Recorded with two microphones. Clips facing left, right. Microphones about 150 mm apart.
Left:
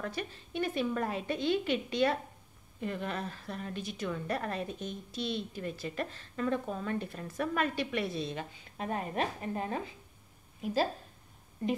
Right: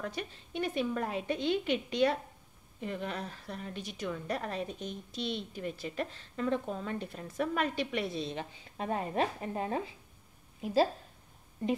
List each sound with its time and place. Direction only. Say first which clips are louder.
0.0 s a woman's voice: left 1 dB; 15° right (ahead or behind); by 9.5 s 30° right (ahead or behind)